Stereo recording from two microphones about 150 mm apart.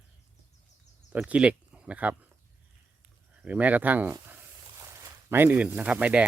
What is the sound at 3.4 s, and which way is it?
Speech, 10° right (ahead or behind).